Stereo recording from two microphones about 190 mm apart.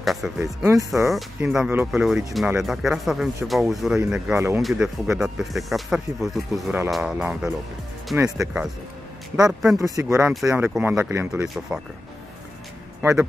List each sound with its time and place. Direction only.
0.0 s speech: centre (ahead or behind)
9.5 s speech: centre (ahead or behind)
9.8 s speech: 15° right (ahead or behind)
11.4 s speech: centre (ahead or behind)
13.0 s speech: 10° right (ahead or behind)